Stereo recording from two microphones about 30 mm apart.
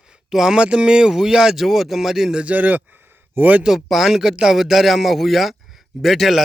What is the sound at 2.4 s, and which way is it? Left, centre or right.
A man's voice, right.